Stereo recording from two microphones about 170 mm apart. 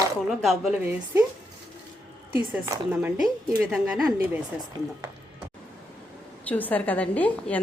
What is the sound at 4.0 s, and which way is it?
Speech, 20° right (ahead or behind).